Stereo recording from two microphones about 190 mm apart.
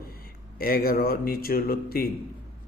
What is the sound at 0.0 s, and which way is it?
Speech, 50° left (ahead or behind).